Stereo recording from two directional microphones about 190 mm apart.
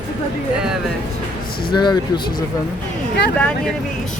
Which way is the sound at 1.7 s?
20° left (ahead or behind).